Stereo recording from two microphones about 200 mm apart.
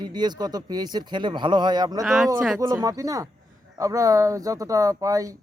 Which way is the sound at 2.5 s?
15° right (ahead or behind).